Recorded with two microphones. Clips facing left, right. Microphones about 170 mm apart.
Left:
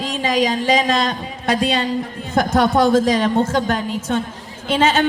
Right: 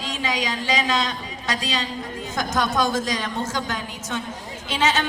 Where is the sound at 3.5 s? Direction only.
60° left (ahead or behind).